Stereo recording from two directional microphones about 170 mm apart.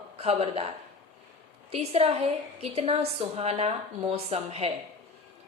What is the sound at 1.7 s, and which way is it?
Speech, 35° right (ahead or behind).